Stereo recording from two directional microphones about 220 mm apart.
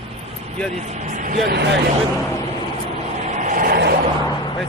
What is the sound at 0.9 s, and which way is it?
Speech, 35° right (ahead or behind).